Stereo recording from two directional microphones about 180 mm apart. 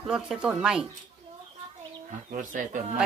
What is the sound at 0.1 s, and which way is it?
Speech, 5° right (ahead or behind).